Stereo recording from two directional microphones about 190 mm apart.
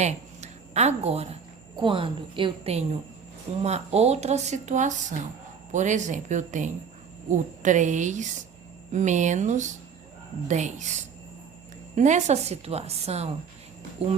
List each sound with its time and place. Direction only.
0.0 s a woman's voice: 35° right (ahead or behind)
11.9 s a woman's voice: 40° right (ahead or behind)